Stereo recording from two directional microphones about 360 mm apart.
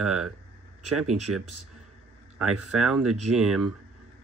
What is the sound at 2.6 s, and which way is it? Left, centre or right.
Speech, centre.